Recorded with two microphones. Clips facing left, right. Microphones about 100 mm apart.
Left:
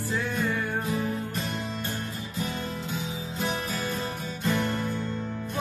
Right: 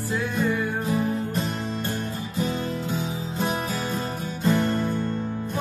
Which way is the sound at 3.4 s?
35° right (ahead or behind).